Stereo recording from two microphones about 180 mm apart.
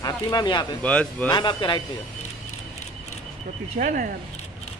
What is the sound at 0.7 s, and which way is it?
Speech, 5° left (ahead or behind).